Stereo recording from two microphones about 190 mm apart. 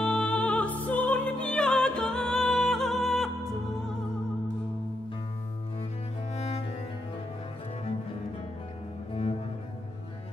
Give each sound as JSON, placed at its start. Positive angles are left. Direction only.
{"t": 0.0, "sound": "music", "side_deg": 5}
{"t": 6.3, "sound": "music", "side_deg": 35}